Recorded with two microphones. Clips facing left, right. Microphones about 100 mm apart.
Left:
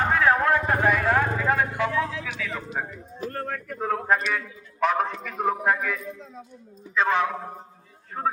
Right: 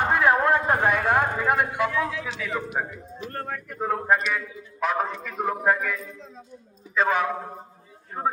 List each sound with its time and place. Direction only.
0.0 s vehicle: 15° right (ahead or behind)
1.7 s a sound: 35° left (ahead or behind)
2.2 s speech: 20° right (ahead or behind)
3.2 s a man's voice: 5° right (ahead or behind)
8.2 s speech: 20° right (ahead or behind)